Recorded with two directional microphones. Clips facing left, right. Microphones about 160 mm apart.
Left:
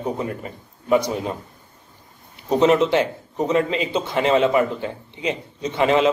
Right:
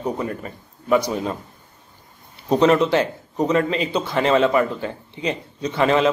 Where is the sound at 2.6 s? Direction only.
20° left (ahead or behind).